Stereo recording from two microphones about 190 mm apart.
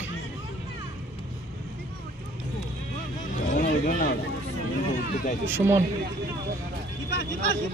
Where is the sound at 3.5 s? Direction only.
45° left (ahead or behind).